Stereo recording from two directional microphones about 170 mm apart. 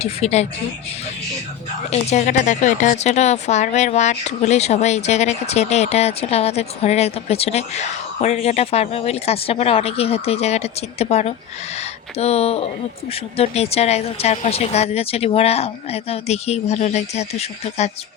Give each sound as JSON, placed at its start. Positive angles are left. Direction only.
{"t": 0.0, "sound": "a woman's voice", "side_deg": 40}
{"t": 1.9, "sound": "a woman's voice", "side_deg": 40}